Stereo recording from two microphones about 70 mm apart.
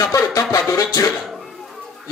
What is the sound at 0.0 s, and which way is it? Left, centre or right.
Music, left.